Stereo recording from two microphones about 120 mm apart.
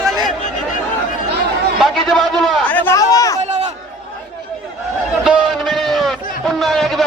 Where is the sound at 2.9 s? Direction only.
30° left (ahead or behind).